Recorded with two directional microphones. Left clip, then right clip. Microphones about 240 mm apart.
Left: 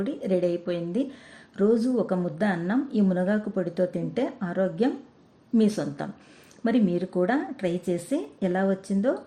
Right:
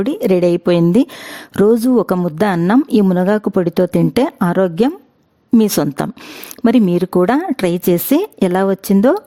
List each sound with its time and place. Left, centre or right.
0.0 s a woman's voice: right